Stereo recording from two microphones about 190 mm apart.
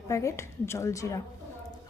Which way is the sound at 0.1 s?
15° left (ahead or behind).